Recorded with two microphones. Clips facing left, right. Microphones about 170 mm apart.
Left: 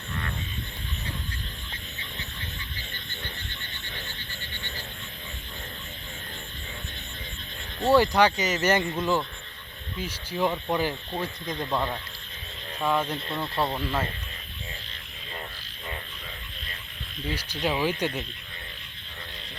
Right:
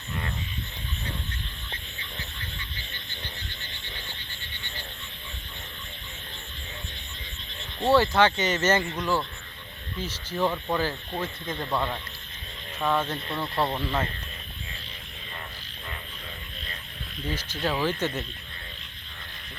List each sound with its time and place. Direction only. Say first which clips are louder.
7.9 s speech: left 1 dB; 15° left (ahead or behind)
11.6 s speech: even; 5° left (ahead or behind)
17.2 s speech: left 1 dB; 10° left (ahead or behind)